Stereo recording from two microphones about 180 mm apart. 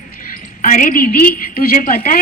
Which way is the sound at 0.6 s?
45° left (ahead or behind).